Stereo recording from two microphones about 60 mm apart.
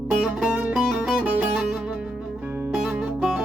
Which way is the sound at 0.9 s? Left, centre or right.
Centre.